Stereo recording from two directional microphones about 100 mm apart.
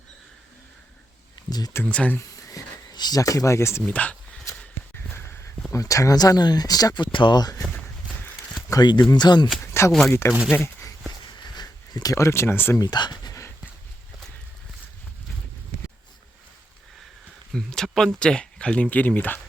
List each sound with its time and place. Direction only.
1.5 s speech: 40° left (ahead or behind)
1.9 s speech: 10° left (ahead or behind)
2.5 s speech: 40° left (ahead or behind)
3.8 s speech: 15° left (ahead or behind)
4.6 s walk: 20° left (ahead or behind)
5.7 s speech: 30° left (ahead or behind); by 7.5 s 50° left (ahead or behind)
8.7 s speech: 45° left (ahead or behind)
9.7 s speech: 25° left (ahead or behind)
10.6 s a sound: 25° left (ahead or behind)
11.4 s a sound: 45° left (ahead or behind)
12.1 s speech: 25° left (ahead or behind)
12.8 s a sound: 45° left (ahead or behind)
17.5 s speech: 5° left (ahead or behind)